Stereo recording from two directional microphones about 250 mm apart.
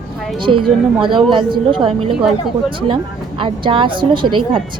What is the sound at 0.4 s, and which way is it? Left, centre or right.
Speech, centre.